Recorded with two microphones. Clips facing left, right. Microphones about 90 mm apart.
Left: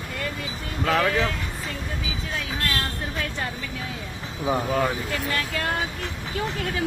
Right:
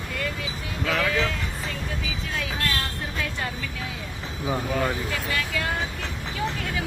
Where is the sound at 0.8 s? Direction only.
40° left (ahead or behind).